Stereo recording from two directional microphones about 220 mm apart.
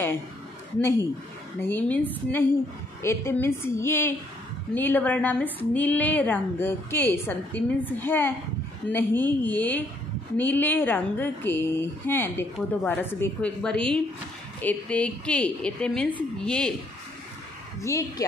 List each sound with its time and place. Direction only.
1.6 s a woman's voice: 10° left (ahead or behind)
17.8 s a woman's voice: 15° left (ahead or behind)